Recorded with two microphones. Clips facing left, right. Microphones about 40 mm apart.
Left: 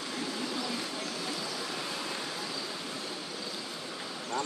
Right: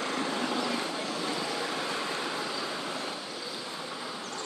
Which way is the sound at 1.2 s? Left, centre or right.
Right.